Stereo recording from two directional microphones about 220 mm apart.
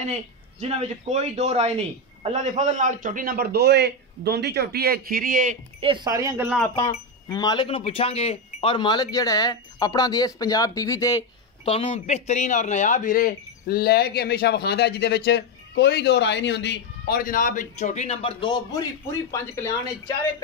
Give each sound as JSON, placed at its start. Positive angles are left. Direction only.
{"t": 0.6, "sound": "a man's voice", "side_deg": -30}
{"t": 5.8, "sound": "speech", "side_deg": -20}
{"t": 6.7, "sound": "speech", "side_deg": 15}